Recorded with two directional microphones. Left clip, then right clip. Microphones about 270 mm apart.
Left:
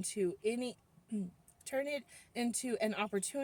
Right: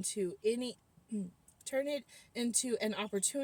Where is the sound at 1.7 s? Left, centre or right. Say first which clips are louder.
Right 2 dB; centre.